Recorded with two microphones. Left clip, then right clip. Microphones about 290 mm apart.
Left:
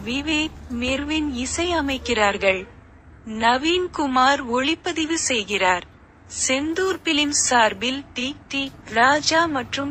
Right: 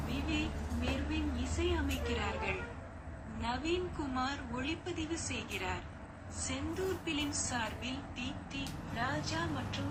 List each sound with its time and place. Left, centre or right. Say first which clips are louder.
0.1 s a woman's voice: left 16 dB; left